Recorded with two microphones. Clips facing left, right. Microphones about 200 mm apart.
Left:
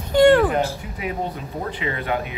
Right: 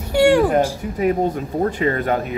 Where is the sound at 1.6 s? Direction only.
45° right (ahead or behind).